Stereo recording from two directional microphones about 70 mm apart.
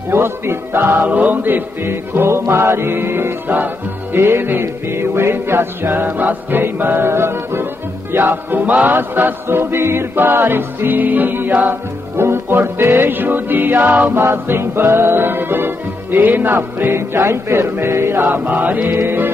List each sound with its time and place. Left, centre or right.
0.1 s music: right